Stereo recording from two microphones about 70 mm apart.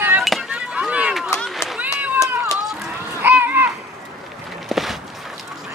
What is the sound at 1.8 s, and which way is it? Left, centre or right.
Cat, right.